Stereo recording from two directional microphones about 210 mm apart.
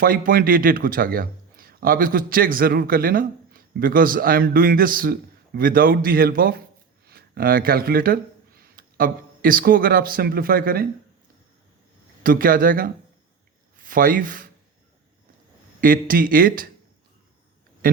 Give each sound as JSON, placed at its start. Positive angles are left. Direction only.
{"t": 0.0, "sound": "speech", "side_deg": -45}
{"t": 12.2, "sound": "speech", "side_deg": -40}
{"t": 15.8, "sound": "speech", "side_deg": -40}
{"t": 17.8, "sound": "speech", "side_deg": -40}